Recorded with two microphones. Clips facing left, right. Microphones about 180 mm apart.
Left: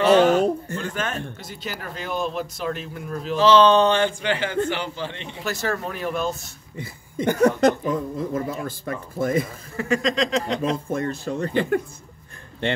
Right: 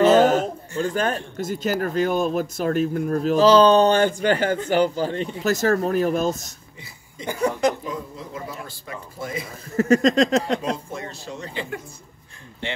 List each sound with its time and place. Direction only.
0.0 s a sound: 45° right (ahead or behind)
0.7 s speech: 35° right (ahead or behind)
6.8 s speech: 60° left (ahead or behind)
9.8 s speech: 40° right (ahead or behind)
10.9 s speech: 50° left (ahead or behind)